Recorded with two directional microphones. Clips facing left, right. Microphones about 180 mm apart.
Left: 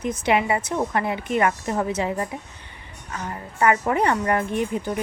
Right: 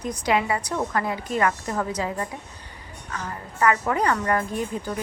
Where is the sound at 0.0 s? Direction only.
25° left (ahead or behind).